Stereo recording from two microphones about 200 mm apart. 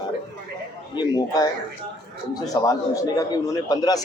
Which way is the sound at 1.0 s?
20° left (ahead or behind).